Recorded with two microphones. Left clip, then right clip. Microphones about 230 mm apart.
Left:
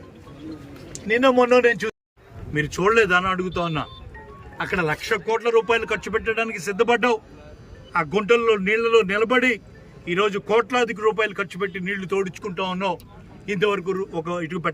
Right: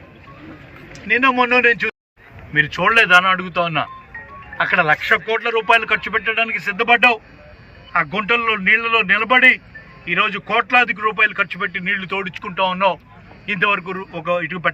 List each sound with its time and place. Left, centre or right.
1.0 s a man's voice: left